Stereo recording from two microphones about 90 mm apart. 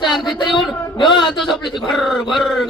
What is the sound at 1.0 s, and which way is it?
Speech, 55° left (ahead or behind).